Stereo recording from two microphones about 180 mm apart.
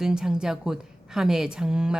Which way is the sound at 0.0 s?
5° right (ahead or behind).